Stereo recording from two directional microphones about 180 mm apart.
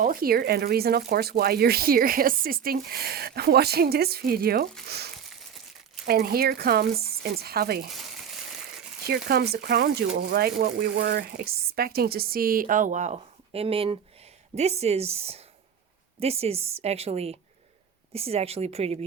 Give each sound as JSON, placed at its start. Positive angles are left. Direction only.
{"t": 0.0, "sound": "speech", "side_deg": -55}
{"t": 7.9, "sound": "crumpling", "side_deg": 0}
{"t": 9.0, "sound": "a woman's voice", "side_deg": -60}